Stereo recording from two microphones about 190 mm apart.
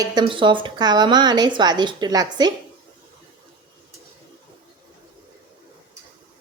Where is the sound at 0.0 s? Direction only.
20° right (ahead or behind).